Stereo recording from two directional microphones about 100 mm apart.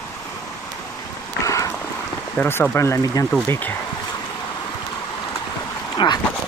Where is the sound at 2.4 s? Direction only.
25° left (ahead or behind).